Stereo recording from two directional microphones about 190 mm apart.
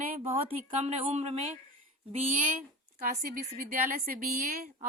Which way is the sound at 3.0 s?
50° right (ahead or behind).